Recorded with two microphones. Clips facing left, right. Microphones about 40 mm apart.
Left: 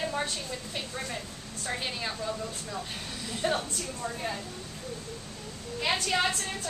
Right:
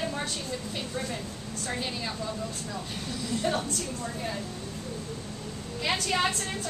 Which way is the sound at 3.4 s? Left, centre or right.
Centre.